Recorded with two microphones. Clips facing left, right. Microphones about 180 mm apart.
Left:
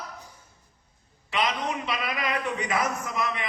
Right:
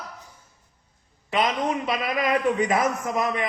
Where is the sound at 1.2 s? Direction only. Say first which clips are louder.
Right 4 dB; 45° right (ahead or behind).